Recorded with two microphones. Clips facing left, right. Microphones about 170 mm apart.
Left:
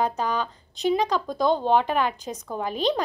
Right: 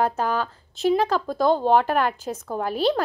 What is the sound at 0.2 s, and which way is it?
A woman's voice, 5° right (ahead or behind).